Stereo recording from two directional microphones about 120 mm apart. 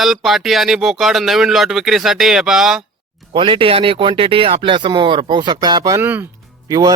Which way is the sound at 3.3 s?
45° right (ahead or behind).